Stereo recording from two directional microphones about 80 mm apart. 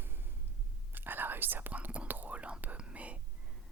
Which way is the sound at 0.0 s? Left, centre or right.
Right.